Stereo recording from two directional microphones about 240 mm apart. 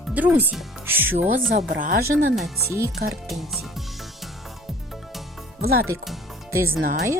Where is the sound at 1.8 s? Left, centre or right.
Right.